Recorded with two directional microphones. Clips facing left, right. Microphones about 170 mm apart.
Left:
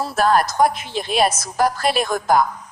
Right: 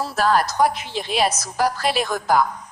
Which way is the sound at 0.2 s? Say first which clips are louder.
Left 2 dB; 50° left (ahead or behind).